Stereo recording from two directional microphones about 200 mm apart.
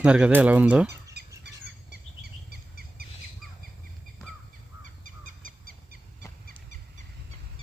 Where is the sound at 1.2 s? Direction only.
55° right (ahead or behind).